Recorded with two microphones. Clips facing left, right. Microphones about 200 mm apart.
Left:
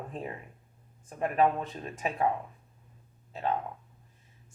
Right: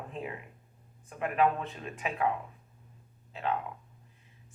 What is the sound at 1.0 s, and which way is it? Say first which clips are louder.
Speech: left 2 dB; 40° left (ahead or behind).